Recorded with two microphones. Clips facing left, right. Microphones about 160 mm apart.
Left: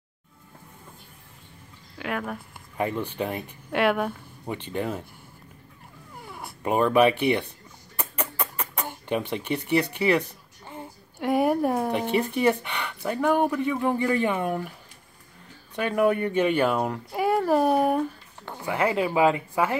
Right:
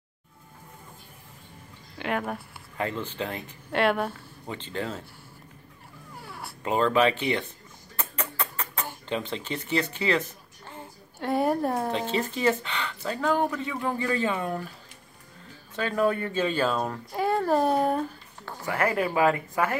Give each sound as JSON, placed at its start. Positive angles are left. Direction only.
{"t": 2.0, "sound": "speech", "side_deg": 0}
{"t": 2.8, "sound": "speech", "side_deg": 15}
{"t": 6.2, "sound": "speech", "side_deg": 20}
{"t": 7.9, "sound": "a sound", "side_deg": 10}
{"t": 9.3, "sound": "a woman's voice", "side_deg": 15}
{"t": 15.7, "sound": "speech", "side_deg": 15}